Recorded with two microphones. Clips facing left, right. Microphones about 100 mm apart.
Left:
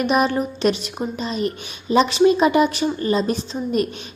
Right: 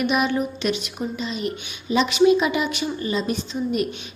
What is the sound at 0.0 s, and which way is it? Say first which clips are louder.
A woman's voice: left 3 dB; 35° left (ahead or behind).